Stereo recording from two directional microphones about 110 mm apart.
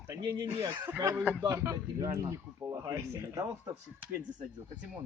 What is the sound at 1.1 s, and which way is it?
Speech, 15° right (ahead or behind).